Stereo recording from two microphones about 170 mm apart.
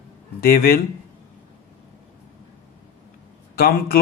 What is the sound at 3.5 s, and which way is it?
Speech, 65° left (ahead or behind).